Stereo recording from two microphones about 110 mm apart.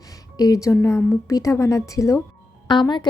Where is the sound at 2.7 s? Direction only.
45° left (ahead or behind).